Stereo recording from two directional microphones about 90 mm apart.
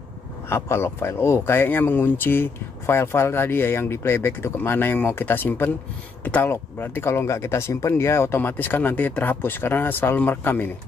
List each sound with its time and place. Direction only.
0.5 s speech: 30° left (ahead or behind)